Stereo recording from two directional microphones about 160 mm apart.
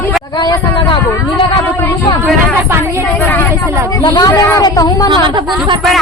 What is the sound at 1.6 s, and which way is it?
Speech, 15° left (ahead or behind).